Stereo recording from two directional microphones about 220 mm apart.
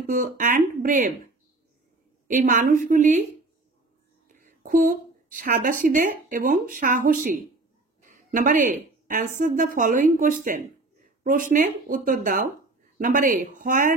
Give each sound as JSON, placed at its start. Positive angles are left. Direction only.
{"t": 0.0, "sound": "a woman's voice", "side_deg": -40}
{"t": 4.3, "sound": "a woman's voice", "side_deg": -40}